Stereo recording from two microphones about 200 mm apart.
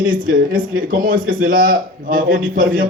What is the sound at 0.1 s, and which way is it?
A man's voice, 45° right (ahead or behind).